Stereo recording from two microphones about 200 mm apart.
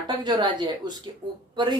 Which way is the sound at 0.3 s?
20° right (ahead or behind).